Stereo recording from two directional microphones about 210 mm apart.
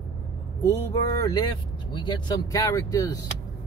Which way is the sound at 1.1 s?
20° left (ahead or behind).